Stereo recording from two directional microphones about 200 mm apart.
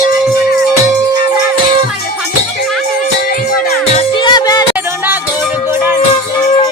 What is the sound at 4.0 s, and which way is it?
Music, 25° left (ahead or behind).